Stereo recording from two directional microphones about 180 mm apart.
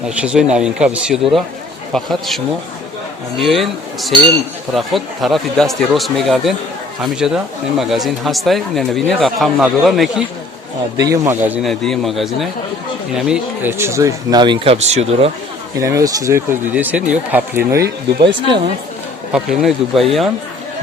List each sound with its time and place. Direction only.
0.0 s speech: 5° right (ahead or behind)
10.9 s speech: 20° right (ahead or behind)
11.6 s speech: centre (ahead or behind); by 15.3 s 35° right (ahead or behind)
15.8 s speech: 15° right (ahead or behind)
18.4 s speech: 30° right (ahead or behind)
19.3 s speech: centre (ahead or behind)